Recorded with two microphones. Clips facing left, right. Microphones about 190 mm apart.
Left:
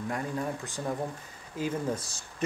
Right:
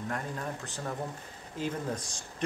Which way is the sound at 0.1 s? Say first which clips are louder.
Left 5 dB; 10° left (ahead or behind).